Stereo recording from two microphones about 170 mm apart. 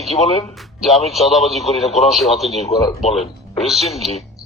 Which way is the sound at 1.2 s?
40° left (ahead or behind).